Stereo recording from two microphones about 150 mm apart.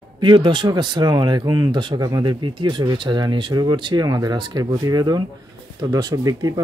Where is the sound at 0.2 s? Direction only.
30° right (ahead or behind).